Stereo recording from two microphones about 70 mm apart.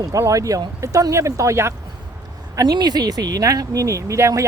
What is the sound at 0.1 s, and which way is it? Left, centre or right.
Speech, right.